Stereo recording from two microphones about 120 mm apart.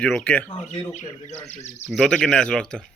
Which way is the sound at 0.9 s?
80° left.